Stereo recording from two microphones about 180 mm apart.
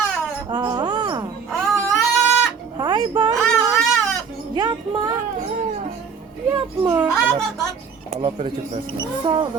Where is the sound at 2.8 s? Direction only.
25° right (ahead or behind).